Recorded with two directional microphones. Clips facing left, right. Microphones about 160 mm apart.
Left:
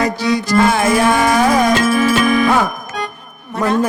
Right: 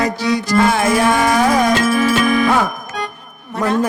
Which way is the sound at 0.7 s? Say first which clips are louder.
Left 1 dB; 10° left (ahead or behind).